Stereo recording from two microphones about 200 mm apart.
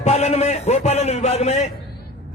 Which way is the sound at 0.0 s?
30° left (ahead or behind).